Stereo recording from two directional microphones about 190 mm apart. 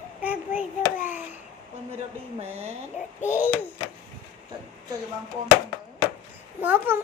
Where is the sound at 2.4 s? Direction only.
35° right (ahead or behind).